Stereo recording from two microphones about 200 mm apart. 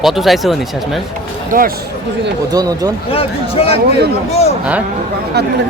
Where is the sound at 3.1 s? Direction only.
30° left (ahead or behind).